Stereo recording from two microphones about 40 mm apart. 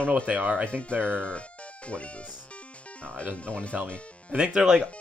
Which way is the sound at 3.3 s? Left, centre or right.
Left.